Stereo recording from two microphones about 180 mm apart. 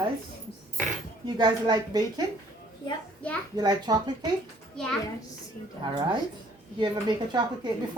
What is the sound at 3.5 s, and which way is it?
Speech, 20° right (ahead or behind).